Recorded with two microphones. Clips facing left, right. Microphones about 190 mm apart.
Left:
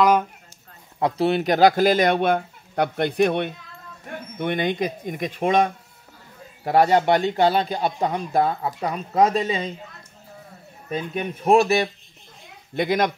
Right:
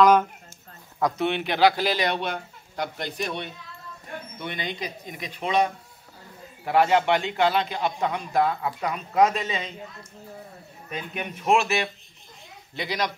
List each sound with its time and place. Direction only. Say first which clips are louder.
0.9 s speech: left 4 dB; 30° left (ahead or behind)
10.9 s speech: left 6 dB; 35° left (ahead or behind)
12.7 s speech: left 8 dB; 50° left (ahead or behind)